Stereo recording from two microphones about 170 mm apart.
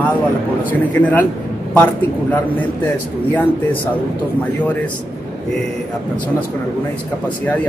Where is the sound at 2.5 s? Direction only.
10° left (ahead or behind).